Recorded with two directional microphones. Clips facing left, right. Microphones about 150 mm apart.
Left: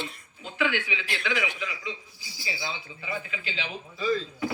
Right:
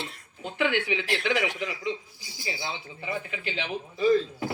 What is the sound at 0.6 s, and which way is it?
A man's voice, 50° right (ahead or behind).